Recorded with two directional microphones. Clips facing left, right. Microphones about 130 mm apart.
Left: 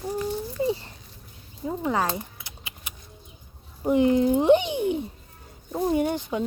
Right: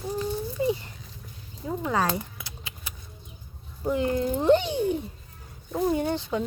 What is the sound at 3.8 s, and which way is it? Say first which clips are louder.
Speech: left 5 dB; 20° left (ahead or behind).